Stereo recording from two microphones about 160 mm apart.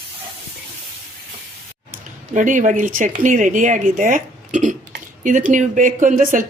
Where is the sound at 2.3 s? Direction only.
50° right (ahead or behind).